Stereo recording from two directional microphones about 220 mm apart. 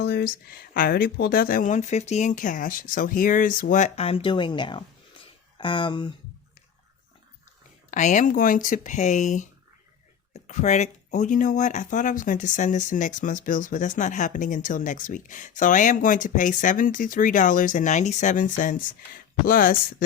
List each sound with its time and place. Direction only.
0.0 s speech: 45° left (ahead or behind); by 6.1 s 20° left (ahead or behind)
7.9 s speech: 35° left (ahead or behind)